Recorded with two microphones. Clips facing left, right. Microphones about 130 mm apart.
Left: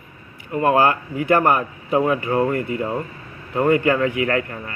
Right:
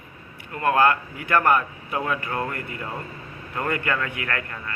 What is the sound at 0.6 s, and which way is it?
Speech, 30° left (ahead or behind).